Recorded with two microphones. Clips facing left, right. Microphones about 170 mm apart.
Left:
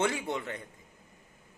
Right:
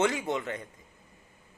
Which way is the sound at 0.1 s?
15° right (ahead or behind).